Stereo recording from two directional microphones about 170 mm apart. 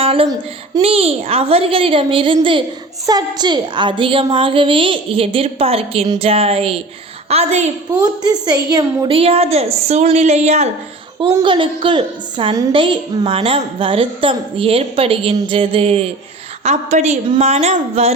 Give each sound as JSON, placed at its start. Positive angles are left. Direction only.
{"t": 0.0, "sound": "a sound", "side_deg": -35}
{"t": 0.8, "sound": "a child's voice", "side_deg": -35}
{"t": 7.9, "sound": "a child's voice", "side_deg": -25}
{"t": 11.2, "sound": "a child's voice", "side_deg": -25}